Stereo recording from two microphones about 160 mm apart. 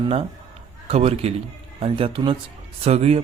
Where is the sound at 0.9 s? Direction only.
40° right (ahead or behind).